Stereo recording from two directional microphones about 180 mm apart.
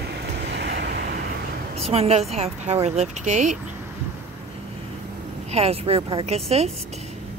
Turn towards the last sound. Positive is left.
turn(degrees=-35)  # may be behind; listen again after turning